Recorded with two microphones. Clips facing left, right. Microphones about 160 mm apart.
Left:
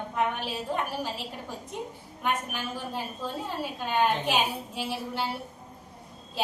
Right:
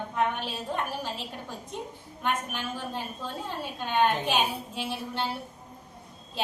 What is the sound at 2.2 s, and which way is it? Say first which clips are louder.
A woman's voice: even; 5° left (ahead or behind).